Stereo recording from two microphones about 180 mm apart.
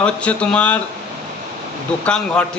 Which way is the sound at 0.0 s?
5° left (ahead or behind).